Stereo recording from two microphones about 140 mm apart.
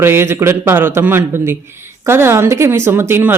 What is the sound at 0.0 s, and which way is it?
Speech, 15° right (ahead or behind).